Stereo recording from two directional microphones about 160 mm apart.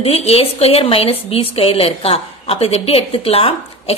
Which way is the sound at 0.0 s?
40° left (ahead or behind).